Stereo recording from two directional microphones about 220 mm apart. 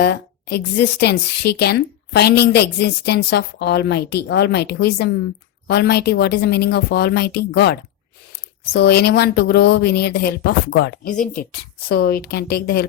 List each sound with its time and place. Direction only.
0.0 s a woman's voice: 50° left (ahead or behind)